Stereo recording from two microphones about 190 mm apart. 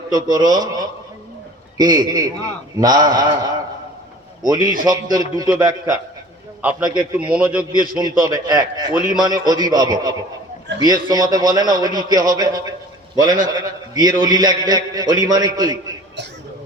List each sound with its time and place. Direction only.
0.1 s a man's voice: 20° right (ahead or behind)
6.6 s a man's voice: 5° right (ahead or behind)
7.9 s a man's voice: 20° right (ahead or behind)